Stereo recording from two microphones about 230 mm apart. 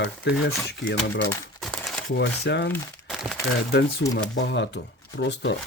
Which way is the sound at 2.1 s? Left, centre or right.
Left.